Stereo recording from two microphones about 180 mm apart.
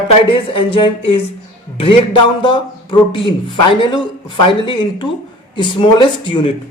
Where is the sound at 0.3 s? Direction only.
30° left (ahead or behind).